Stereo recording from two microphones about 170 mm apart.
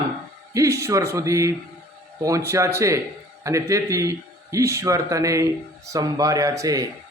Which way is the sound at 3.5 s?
20° right (ahead or behind).